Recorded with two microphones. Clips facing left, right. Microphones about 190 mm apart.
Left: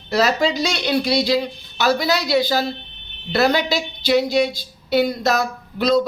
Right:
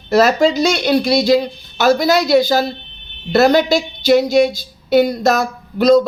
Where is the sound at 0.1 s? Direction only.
50° right (ahead or behind).